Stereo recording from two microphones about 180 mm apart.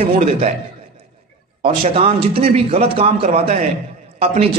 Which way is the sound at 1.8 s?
35° right (ahead or behind).